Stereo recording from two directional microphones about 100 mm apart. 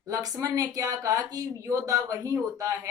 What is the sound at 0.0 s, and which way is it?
Speech, 35° right (ahead or behind).